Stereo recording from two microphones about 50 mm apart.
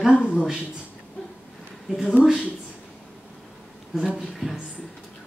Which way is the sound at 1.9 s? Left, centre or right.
Centre.